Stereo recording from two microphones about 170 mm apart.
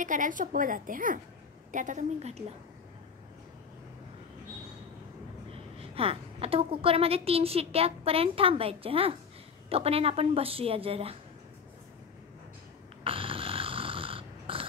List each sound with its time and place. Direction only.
0.0 s a woman's voice: 50° right (ahead or behind)
5.9 s a woman's voice: 35° right (ahead or behind)
13.0 s snoring: 30° right (ahead or behind)